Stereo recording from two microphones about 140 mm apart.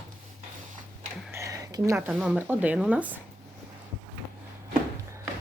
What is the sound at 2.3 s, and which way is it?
Speech, 10° right (ahead or behind).